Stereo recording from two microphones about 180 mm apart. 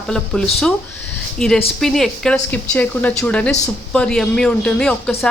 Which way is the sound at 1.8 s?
Centre (ahead or behind).